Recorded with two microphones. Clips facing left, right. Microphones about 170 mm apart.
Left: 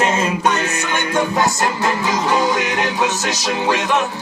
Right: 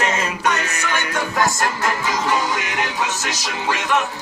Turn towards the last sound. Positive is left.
turn(degrees=20)  # may be behind; listen again after turning